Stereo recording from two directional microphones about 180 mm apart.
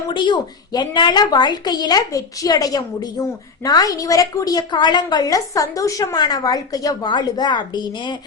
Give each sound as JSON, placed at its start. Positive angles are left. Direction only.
{"t": 0.1, "sound": "a woman's voice", "side_deg": 25}